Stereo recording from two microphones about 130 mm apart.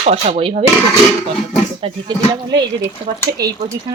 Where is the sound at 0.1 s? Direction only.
50° right (ahead or behind).